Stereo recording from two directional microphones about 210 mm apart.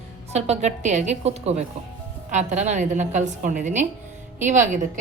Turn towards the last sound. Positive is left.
turn(degrees=-35)  # may be behind; listen again after turning